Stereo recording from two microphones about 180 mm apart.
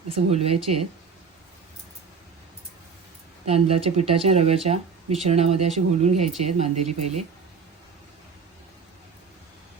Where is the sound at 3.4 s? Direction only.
35° right (ahead or behind).